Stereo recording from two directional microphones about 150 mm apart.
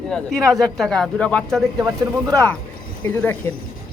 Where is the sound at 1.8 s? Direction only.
25° right (ahead or behind).